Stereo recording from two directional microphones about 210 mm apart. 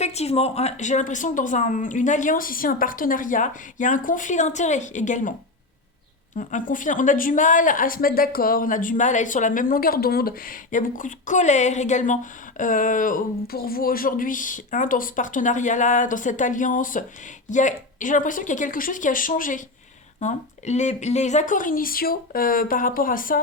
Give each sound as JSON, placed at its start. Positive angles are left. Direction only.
{"t": 0.0, "sound": "a woman's voice", "side_deg": 30}
{"t": 6.3, "sound": "a woman's voice", "side_deg": 35}